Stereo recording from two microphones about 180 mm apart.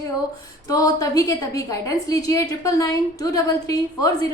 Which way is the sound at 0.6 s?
20° left (ahead or behind).